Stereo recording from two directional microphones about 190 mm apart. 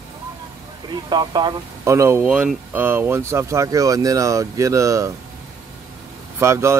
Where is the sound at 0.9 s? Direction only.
20° right (ahead or behind).